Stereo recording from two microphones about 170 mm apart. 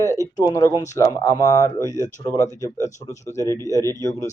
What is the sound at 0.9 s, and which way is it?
Speech, 20° left (ahead or behind).